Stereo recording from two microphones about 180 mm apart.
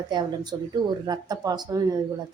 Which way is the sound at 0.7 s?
20° right (ahead or behind).